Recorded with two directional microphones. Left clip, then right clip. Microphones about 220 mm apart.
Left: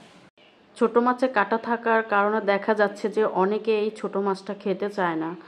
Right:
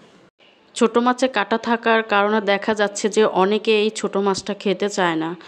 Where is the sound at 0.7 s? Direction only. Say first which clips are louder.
Right 4 dB; 40° right (ahead or behind).